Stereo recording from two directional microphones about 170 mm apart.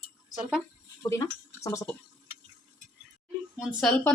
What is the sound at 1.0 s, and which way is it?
Speech, 20° left (ahead or behind).